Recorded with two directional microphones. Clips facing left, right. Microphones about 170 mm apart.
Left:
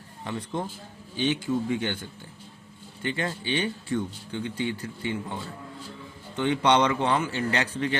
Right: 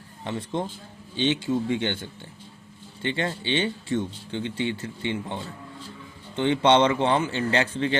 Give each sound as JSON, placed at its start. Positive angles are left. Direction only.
{"t": 0.3, "sound": "speech", "side_deg": -25}